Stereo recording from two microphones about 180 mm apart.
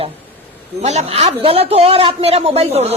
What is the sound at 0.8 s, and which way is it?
A woman's voice, 40° right (ahead or behind).